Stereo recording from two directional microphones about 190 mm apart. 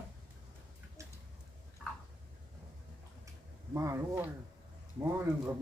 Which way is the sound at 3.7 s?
15° right (ahead or behind).